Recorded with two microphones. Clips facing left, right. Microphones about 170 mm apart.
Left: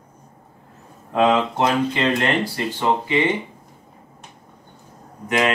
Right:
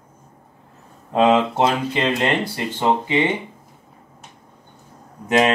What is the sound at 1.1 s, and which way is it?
Speech, 20° right (ahead or behind).